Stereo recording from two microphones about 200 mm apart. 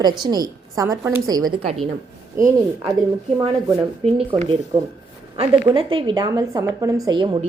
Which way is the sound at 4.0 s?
30° right (ahead or behind).